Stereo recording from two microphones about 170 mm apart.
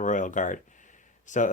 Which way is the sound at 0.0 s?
45° left (ahead or behind).